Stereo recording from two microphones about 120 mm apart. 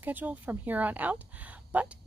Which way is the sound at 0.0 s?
15° right (ahead or behind).